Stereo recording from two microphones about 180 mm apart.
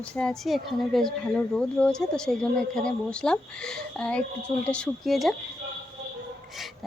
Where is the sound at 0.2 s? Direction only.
Centre (ahead or behind).